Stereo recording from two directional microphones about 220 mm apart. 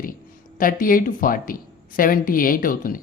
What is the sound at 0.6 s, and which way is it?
Speech, 40° left (ahead or behind).